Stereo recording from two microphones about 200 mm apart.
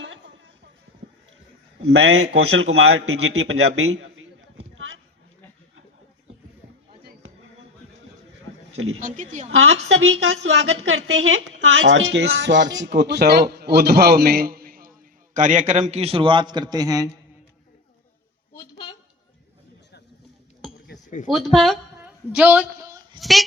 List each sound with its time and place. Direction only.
1.8 s a man's voice: 65° right (ahead or behind)
2.3 s a man's voice: 85° right
8.7 s a sound: 90° right
9.0 s a woman's voice: 40° right (ahead or behind)
9.5 s a woman's voice: 80° right; by 17.1 s 20° right (ahead or behind)
21.2 s a sound: centre (ahead or behind); by 23.2 s 15° right (ahead or behind)
23.2 s speech: centre (ahead or behind)